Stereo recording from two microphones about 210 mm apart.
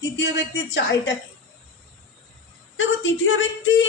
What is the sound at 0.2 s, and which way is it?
Speech, 55° left (ahead or behind).